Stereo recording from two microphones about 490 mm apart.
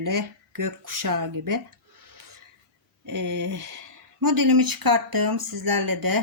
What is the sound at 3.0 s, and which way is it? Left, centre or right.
Speech, right.